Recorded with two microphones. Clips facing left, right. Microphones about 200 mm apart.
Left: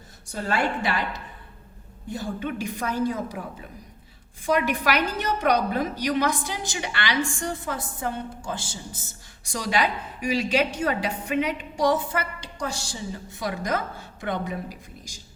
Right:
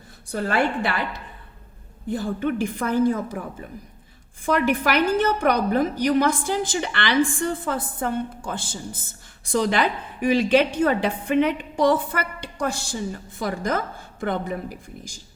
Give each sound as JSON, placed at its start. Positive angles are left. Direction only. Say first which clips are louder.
{"t": 0.3, "sound": "a woman's voice", "louder": "right 3 dB", "side_deg": -55}
{"t": 2.0, "sound": "a woman's voice", "louder": "right 5 dB", "side_deg": -55}
{"t": 4.4, "sound": "a woman's voice", "louder": "right 2 dB", "side_deg": -55}